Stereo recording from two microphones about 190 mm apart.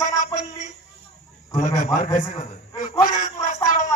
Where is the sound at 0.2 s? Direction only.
40° left (ahead or behind).